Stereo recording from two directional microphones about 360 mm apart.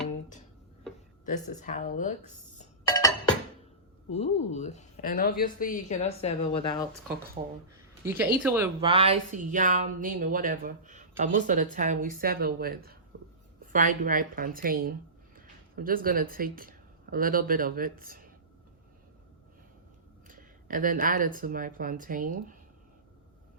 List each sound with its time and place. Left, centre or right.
1.2 s speech: left
4.1 s speech: centre
7.4 s speech: centre
8.0 s speech: centre; by 18.3 s right
20.2 s speech: right